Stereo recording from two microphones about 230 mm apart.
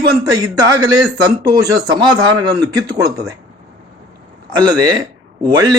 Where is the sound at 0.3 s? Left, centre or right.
Centre.